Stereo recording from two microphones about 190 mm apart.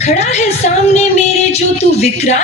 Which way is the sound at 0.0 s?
35° left (ahead or behind).